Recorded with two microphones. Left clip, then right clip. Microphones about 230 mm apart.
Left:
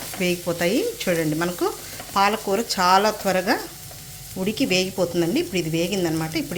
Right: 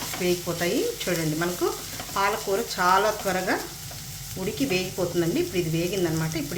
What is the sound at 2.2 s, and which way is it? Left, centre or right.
Speech, left.